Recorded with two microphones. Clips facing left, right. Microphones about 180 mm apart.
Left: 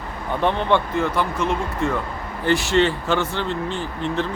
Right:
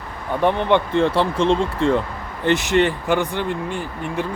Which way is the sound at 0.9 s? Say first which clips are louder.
Right 4 dB; 30° right (ahead or behind).